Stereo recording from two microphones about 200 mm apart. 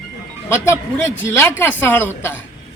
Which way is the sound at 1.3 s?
10° left (ahead or behind).